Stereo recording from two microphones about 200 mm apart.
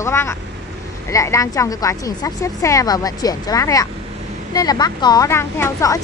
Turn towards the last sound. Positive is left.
turn(degrees=15)  # may be behind; listen again after turning